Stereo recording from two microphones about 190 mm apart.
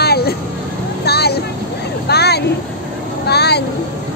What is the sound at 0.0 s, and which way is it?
Vehicle, 55° left (ahead or behind).